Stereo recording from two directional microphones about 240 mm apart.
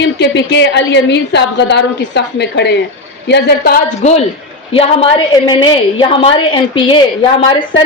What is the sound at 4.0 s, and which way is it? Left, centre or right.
A woman's voice, left.